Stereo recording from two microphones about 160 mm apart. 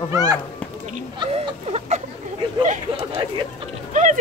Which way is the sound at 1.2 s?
40° right (ahead or behind).